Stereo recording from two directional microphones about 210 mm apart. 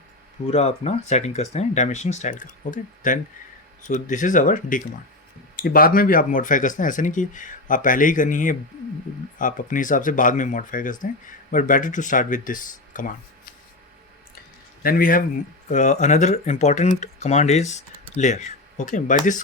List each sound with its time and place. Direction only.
0.4 s speech: 30° left (ahead or behind)
14.8 s a man's voice: 40° left (ahead or behind)